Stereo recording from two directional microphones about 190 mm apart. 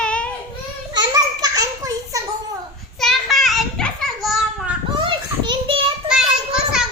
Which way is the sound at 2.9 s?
Centre (ahead or behind).